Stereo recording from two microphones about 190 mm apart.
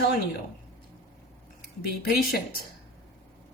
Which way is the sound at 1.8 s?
55° left (ahead or behind).